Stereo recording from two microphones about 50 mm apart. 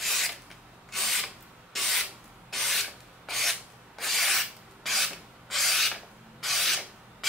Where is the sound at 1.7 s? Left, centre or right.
Centre.